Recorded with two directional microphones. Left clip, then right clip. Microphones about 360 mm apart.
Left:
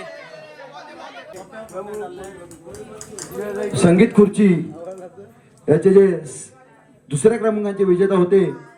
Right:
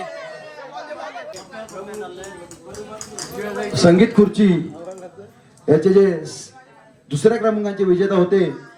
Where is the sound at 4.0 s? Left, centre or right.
Left.